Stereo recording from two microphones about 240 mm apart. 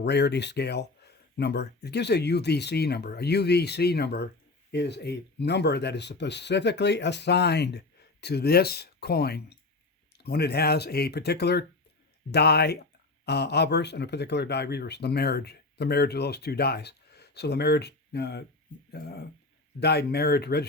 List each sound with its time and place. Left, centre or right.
0.0 s speech: left